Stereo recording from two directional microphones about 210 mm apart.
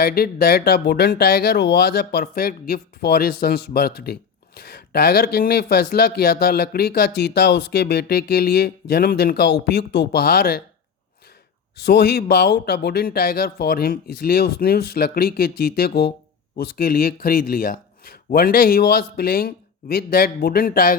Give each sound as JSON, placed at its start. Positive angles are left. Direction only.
{"t": 0.0, "sound": "speech", "side_deg": 45}
{"t": 11.8, "sound": "speech", "side_deg": 50}